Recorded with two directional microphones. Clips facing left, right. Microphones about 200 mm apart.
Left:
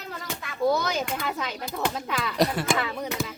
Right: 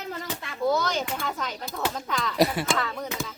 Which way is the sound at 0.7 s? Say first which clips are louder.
Right 1 dB; 10° left (ahead or behind).